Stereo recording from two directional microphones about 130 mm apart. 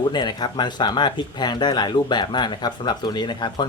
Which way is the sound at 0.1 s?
35° left (ahead or behind).